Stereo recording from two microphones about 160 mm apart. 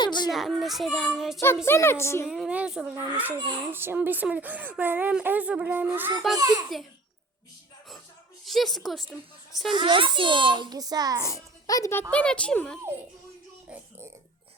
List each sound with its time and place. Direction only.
0.0 s children playing: 30° left (ahead or behind)
0.3 s a child's voice: centre (ahead or behind)
1.6 s a woman's voice: 15° left (ahead or behind)
2.2 s a child's voice: centre (ahead or behind)
3.3 s a child's voice: 25° right (ahead or behind)
3.7 s a child's voice: 15° right (ahead or behind)
8.4 s a child's voice: centre (ahead or behind)
9.6 s a child's voice: 30° right (ahead or behind)
11.6 s a child's voice: 20° left (ahead or behind)
12.1 s a woman's voice: 5° left (ahead or behind)